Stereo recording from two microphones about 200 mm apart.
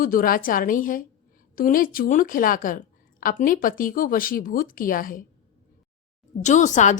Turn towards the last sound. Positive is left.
turn(degrees=40)  # may be behind; listen again after turning